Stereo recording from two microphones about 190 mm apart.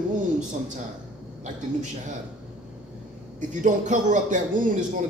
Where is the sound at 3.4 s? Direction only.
40° right (ahead or behind).